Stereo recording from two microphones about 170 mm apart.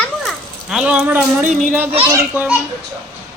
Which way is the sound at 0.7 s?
5° right (ahead or behind).